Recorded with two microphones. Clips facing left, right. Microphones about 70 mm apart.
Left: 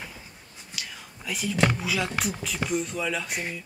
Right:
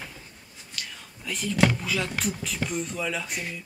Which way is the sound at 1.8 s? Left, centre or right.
Centre.